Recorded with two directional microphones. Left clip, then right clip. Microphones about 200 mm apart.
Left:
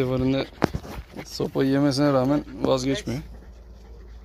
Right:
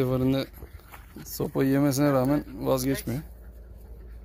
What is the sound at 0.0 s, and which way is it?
Speech, 5° right (ahead or behind).